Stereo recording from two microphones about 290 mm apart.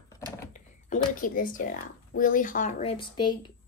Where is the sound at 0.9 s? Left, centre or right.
Left.